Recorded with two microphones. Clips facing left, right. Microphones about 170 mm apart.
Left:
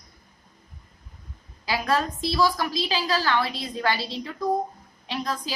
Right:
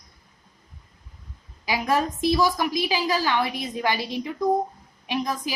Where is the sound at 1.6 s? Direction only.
15° right (ahead or behind).